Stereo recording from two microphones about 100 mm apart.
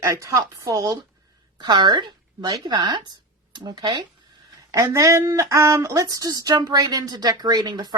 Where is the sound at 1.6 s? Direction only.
50° right (ahead or behind).